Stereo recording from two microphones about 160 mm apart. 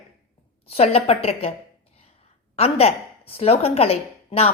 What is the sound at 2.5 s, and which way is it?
A woman's voice, 40° left (ahead or behind).